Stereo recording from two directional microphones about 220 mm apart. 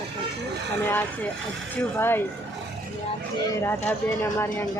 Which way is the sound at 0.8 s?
10° left (ahead or behind).